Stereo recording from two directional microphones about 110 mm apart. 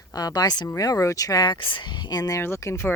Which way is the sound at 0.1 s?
35° left (ahead or behind).